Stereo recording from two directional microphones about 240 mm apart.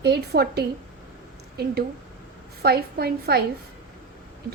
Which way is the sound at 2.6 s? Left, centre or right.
Right.